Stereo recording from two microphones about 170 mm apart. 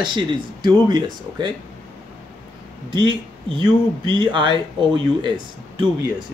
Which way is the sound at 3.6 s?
30° right (ahead or behind).